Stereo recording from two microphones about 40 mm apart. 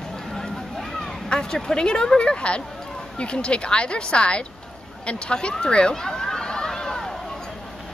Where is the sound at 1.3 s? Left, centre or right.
Centre.